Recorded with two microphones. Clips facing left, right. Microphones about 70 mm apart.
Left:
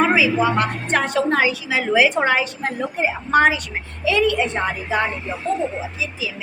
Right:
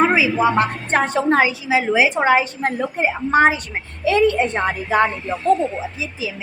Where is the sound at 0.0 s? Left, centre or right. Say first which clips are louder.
Right 1 dB; right.